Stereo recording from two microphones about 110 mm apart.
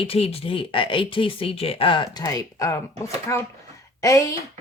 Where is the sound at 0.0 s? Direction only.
60° left (ahead or behind).